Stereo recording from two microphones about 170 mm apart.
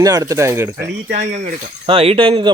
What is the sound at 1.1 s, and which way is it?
Speech, 45° right (ahead or behind).